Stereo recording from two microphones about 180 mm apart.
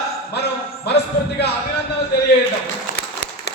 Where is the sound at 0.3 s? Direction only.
65° left (ahead or behind).